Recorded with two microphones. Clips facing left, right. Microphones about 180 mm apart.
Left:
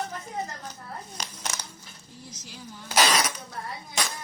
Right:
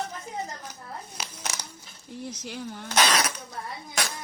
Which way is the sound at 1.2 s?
5° right (ahead or behind).